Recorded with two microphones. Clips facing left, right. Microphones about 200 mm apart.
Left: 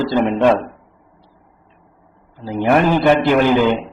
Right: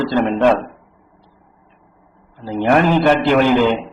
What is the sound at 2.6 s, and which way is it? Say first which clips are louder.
Speech: even; 10° left (ahead or behind).